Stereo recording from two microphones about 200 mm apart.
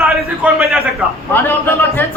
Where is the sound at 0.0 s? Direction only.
Centre (ahead or behind).